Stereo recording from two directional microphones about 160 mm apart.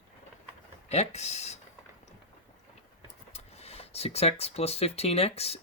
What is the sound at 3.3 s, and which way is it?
Speech, 40° left (ahead or behind).